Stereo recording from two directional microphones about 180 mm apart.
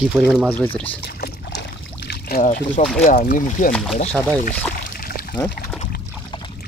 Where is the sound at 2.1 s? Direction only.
55° left (ahead or behind).